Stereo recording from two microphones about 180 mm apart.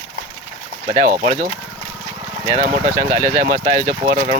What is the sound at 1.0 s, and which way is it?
Speech, 50° right (ahead or behind).